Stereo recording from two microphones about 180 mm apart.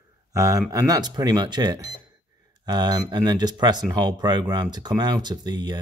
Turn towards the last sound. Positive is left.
turn(degrees=-25)  # may be behind; listen again after turning